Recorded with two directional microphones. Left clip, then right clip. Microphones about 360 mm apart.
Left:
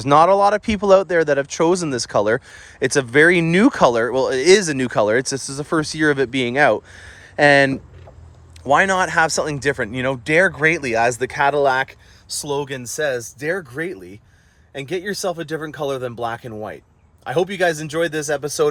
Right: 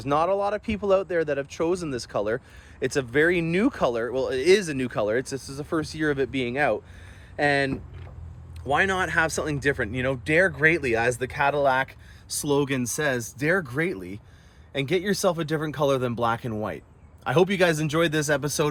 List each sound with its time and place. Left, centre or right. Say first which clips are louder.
0.0 s speech: left 10 dB; left
12.3 s speech: left 1 dB; centre